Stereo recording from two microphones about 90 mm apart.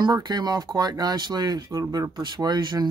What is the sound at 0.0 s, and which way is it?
Speech, 55° right (ahead or behind).